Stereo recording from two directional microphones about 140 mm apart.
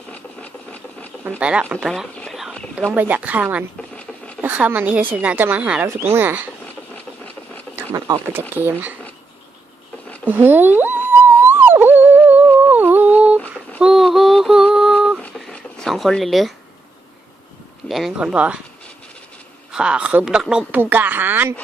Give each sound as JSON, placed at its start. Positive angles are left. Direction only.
{"t": 0.1, "sound": "engine", "side_deg": 10}
{"t": 1.4, "sound": "a woman's voice", "side_deg": -10}
{"t": 1.9, "sound": "whispering", "side_deg": 0}
{"t": 2.9, "sound": "a woman's voice", "side_deg": -10}
{"t": 7.8, "sound": "a sound", "side_deg": -20}
{"t": 8.3, "sound": "a woman's voice", "side_deg": -15}
{"t": 10.2, "sound": "a sound", "side_deg": -15}
{"t": 13.7, "sound": "synthetic singing", "side_deg": -5}
{"t": 15.2, "sound": "a sound", "side_deg": 5}
{"t": 17.8, "sound": "a woman's voice", "side_deg": 0}
{"t": 19.7, "sound": "a woman's voice", "side_deg": -5}